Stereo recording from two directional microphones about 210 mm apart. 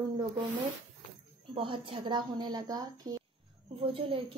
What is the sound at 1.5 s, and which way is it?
A woman's voice, 25° right (ahead or behind).